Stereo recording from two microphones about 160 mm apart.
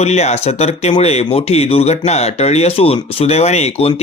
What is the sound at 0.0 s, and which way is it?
Speech, 40° left (ahead or behind).